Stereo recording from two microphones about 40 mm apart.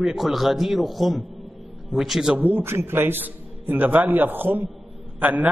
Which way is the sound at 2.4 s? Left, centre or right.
Right.